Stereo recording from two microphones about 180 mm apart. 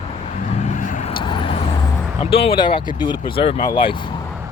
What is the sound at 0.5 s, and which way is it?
Vehicle, 40° left (ahead or behind).